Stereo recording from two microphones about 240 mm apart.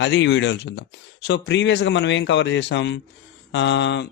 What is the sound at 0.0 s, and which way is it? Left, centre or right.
A man's voice, left.